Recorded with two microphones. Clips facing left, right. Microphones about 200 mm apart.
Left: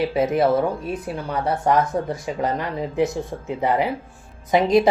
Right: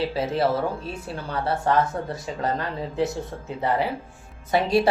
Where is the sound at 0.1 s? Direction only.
15° left (ahead or behind).